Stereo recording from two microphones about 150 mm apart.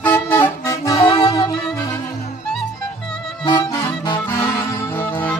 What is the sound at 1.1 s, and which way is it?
Music, 35° left (ahead or behind).